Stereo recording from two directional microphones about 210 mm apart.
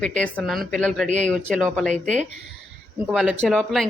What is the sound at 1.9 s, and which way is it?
Speech, 35° right (ahead or behind).